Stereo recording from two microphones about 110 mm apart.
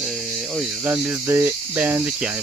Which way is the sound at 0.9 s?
15° right (ahead or behind).